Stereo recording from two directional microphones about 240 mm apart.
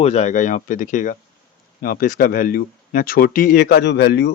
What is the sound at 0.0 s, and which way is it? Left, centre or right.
Speech, left.